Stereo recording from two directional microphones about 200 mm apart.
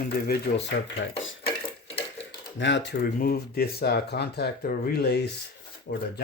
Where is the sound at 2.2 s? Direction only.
65° left (ahead or behind).